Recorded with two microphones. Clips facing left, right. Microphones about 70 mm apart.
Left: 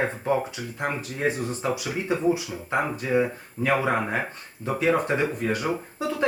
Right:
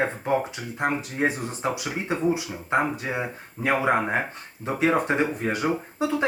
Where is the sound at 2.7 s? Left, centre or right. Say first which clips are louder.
Left 1 dB; centre.